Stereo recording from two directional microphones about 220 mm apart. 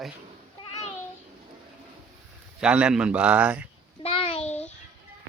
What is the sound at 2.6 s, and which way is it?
A man's voice, 5° right (ahead or behind).